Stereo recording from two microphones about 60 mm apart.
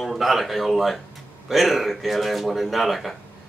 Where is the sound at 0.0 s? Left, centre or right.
Centre.